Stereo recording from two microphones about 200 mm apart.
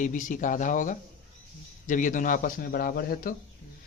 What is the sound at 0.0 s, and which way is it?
A man's voice, 40° left (ahead or behind).